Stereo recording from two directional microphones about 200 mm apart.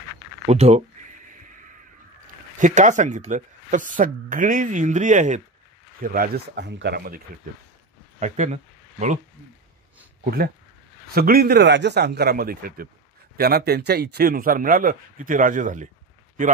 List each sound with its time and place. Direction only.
0.5 s speech: 35° right (ahead or behind)
2.6 s a man's voice: 40° right (ahead or behind); by 7.2 s 55° right (ahead or behind)
8.2 s speech: 35° right (ahead or behind)
11.1 s a man's voice: 50° right (ahead or behind)